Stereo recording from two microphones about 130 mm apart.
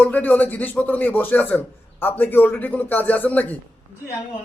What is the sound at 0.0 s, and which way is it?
Speech, 10° left (ahead or behind).